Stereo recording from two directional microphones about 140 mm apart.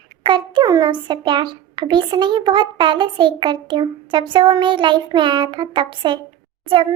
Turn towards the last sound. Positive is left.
turn(degrees=-40)  # may be behind; listen again after turning